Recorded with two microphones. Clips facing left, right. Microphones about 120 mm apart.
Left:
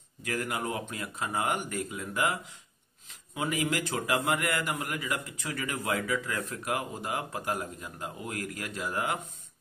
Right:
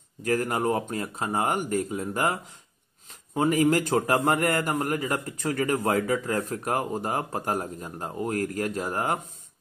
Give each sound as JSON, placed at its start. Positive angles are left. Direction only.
{"t": 0.2, "sound": "a man's voice", "side_deg": -40}